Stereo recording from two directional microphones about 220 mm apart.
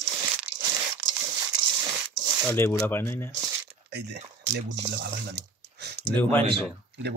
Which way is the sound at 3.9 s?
50° right (ahead or behind).